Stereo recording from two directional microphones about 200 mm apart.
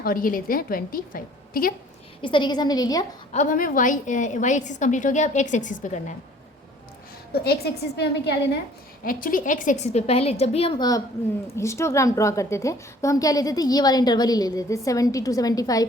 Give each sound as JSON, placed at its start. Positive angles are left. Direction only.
{"t": 0.0, "sound": "a woman's voice", "side_deg": 45}
{"t": 2.2, "sound": "a woman's voice", "side_deg": 25}
{"t": 3.3, "sound": "a woman's voice", "side_deg": 40}
{"t": 7.4, "sound": "a woman's voice", "side_deg": 50}
{"t": 9.0, "sound": "a woman's voice", "side_deg": 45}